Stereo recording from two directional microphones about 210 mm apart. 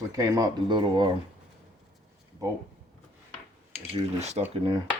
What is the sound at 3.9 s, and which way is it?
Speech, 30° right (ahead or behind).